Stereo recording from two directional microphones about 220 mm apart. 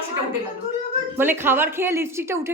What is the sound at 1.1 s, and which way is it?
Speech, 10° right (ahead or behind).